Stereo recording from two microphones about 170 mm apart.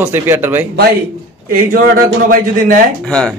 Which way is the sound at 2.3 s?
55° right (ahead or behind).